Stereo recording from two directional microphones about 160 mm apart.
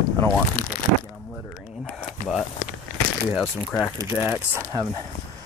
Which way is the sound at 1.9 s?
5° left (ahead or behind).